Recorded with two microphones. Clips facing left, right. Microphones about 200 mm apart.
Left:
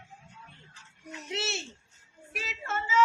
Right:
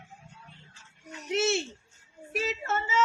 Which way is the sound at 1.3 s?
50° right (ahead or behind).